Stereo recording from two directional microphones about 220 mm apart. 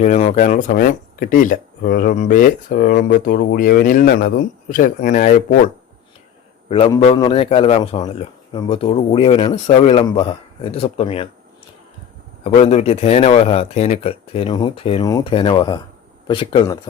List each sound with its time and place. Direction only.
0.0 s speech: 35° left (ahead or behind)
6.7 s a man's voice: 25° left (ahead or behind)
12.5 s a man's voice: 30° left (ahead or behind)